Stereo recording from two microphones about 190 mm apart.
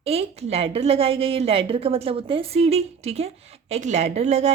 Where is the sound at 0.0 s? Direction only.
30° right (ahead or behind).